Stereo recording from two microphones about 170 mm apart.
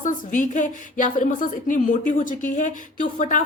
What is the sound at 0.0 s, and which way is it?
A woman's voice, 50° left (ahead or behind).